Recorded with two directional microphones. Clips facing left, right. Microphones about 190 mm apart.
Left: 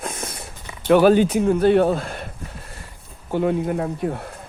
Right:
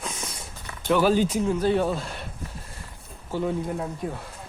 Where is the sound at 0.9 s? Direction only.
60° left (ahead or behind).